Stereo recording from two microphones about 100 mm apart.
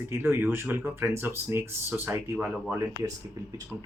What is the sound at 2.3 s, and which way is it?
Speech, 5° right (ahead or behind).